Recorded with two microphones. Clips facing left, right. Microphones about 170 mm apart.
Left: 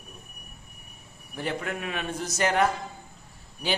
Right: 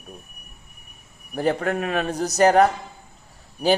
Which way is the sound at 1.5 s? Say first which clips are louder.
Right 8 dB; 45° right (ahead or behind).